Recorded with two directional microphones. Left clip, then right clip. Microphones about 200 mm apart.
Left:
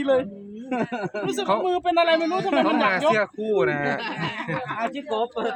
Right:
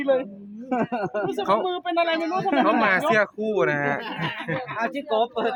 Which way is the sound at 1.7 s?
20° left (ahead or behind).